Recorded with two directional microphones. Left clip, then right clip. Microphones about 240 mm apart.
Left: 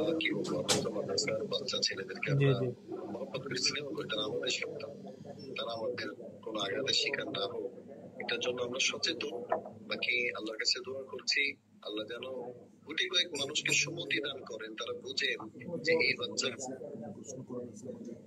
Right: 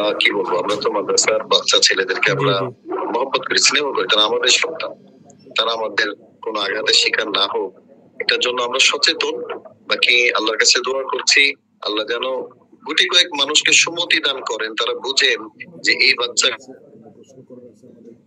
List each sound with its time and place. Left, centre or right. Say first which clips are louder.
0.0 s speech: right 16 dB; right